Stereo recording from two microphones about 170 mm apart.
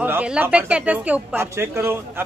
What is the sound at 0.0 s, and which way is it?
A man's voice, 10° right (ahead or behind).